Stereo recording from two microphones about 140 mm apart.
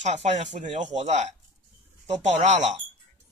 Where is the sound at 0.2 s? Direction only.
55° right (ahead or behind).